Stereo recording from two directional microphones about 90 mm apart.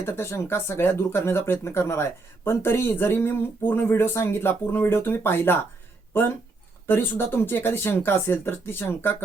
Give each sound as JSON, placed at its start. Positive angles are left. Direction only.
{"t": 0.0, "sound": "speech", "side_deg": 30}